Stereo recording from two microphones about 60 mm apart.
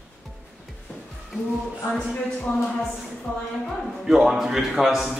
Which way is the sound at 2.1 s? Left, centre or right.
Centre.